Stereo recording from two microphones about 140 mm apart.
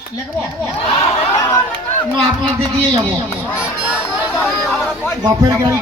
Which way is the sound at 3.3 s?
20° left (ahead or behind).